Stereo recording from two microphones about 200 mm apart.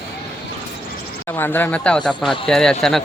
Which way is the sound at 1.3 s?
10° left (ahead or behind).